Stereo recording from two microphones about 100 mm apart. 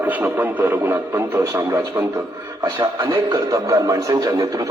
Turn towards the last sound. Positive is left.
turn(degrees=-35)  # may be behind; listen again after turning